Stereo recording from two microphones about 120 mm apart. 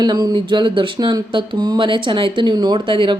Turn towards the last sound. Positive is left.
turn(degrees=-45)  # may be behind; listen again after turning